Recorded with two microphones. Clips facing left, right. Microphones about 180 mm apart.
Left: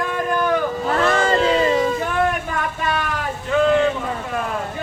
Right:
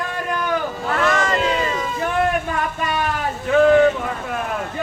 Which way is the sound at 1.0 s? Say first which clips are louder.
Left 2 dB; 30° left (ahead or behind).